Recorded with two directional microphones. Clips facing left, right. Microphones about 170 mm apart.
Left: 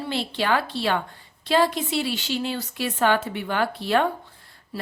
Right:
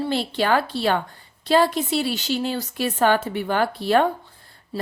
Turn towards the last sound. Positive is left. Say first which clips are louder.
# right 3 dB
turn(degrees=-40)  # may be behind; listen again after turning